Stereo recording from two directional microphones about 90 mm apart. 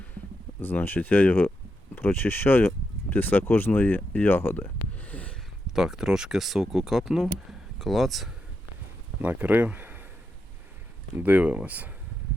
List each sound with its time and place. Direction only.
0.6 s speech: 20° left (ahead or behind)
5.6 s speech: 5° right (ahead or behind)
9.2 s speech: 20° right (ahead or behind)
11.2 s speech: 15° right (ahead or behind)